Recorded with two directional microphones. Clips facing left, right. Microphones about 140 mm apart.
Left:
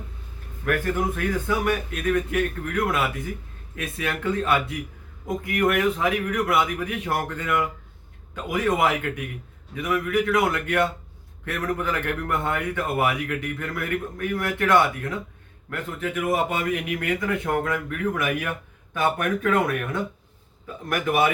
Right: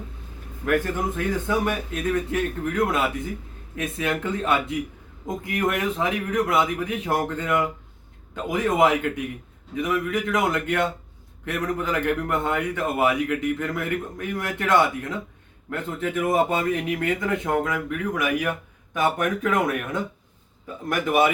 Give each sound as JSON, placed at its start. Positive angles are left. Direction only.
{"t": 0.6, "sound": "a man's voice", "side_deg": -20}